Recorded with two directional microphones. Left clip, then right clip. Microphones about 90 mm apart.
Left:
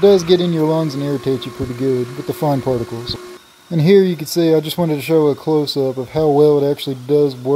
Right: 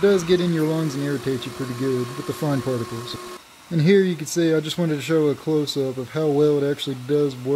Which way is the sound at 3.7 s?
35° left (ahead or behind).